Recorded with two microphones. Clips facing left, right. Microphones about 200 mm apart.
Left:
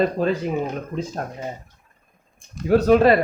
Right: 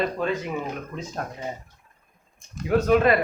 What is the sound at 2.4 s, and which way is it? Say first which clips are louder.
Speech: left 5 dB; 35° left (ahead or behind).